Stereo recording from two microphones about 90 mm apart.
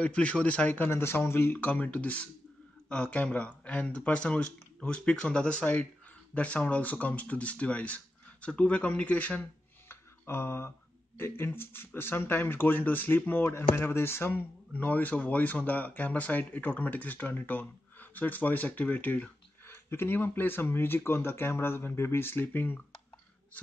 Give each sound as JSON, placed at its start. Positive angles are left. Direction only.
{"t": 0.0, "sound": "speech", "side_deg": 15}
{"t": 0.8, "sound": "speech", "side_deg": 25}
{"t": 9.8, "sound": "a sound", "side_deg": 25}
{"t": 11.1, "sound": "speech", "side_deg": 25}
{"t": 19.6, "sound": "speech", "side_deg": 25}